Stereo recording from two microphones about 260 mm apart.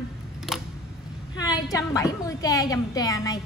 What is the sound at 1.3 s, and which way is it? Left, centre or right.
A woman's voice, centre.